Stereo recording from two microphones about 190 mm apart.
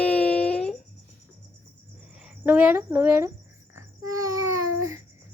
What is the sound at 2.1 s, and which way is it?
Speech, 5° right (ahead or behind).